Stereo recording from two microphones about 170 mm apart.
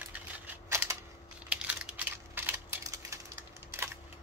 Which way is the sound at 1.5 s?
5° right (ahead or behind).